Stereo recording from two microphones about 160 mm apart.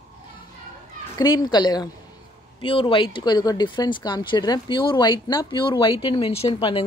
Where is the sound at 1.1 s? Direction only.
25° left (ahead or behind).